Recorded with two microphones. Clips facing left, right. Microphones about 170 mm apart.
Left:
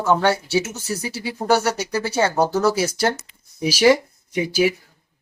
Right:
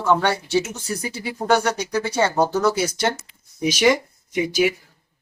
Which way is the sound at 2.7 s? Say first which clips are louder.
Left 1 dB; 30° left (ahead or behind).